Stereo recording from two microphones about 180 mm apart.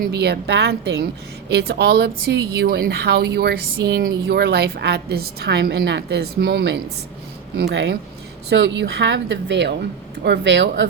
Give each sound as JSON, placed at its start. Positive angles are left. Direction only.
{"t": 0.0, "sound": "a woman's voice", "side_deg": -65}